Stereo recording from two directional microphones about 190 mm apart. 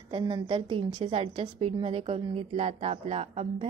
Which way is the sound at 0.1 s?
25° right (ahead or behind).